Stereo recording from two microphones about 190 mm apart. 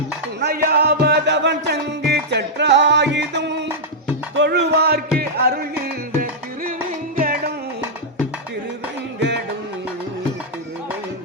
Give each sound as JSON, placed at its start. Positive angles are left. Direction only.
{"t": 0.3, "sound": "music", "side_deg": -55}
{"t": 4.4, "sound": "a sound", "side_deg": -65}
{"t": 7.2, "sound": "music", "side_deg": -50}